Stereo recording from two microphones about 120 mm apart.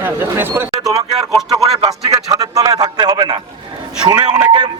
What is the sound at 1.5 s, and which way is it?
A man's voice, 30° right (ahead or behind).